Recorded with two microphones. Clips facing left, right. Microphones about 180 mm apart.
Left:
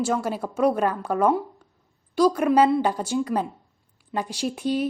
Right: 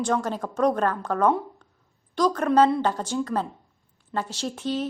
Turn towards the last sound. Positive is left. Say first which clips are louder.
# left 3 dB
turn(degrees=10)  # may be behind; listen again after turning